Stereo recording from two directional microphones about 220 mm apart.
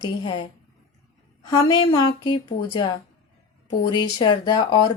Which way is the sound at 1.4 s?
15° left (ahead or behind).